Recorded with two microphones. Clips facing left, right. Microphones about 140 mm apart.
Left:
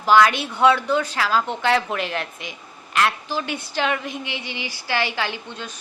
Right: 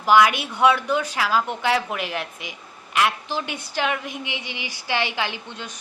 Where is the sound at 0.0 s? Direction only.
15° right (ahead or behind).